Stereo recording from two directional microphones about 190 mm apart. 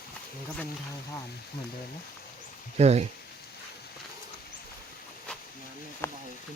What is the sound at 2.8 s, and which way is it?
Speech, 35° right (ahead or behind).